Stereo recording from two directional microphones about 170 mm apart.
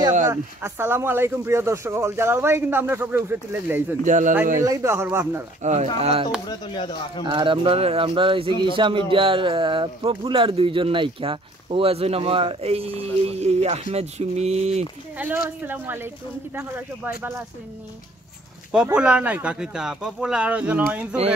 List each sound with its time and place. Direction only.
0.3 s speech: 15° right (ahead or behind)
4.0 s speech: 50° right (ahead or behind)
4.6 s speech: 15° right (ahead or behind)
5.6 s speech: 40° right (ahead or behind)
6.5 s speech: 25° left (ahead or behind)
7.2 s speech: 30° right (ahead or behind)
15.1 s speech: 10° right (ahead or behind)
18.7 s speech: 5° right (ahead or behind)